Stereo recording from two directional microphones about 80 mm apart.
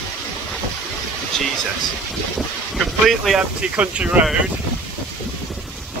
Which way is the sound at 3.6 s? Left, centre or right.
Centre.